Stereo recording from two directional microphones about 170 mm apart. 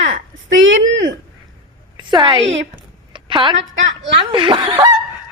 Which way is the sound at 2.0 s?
25° right (ahead or behind).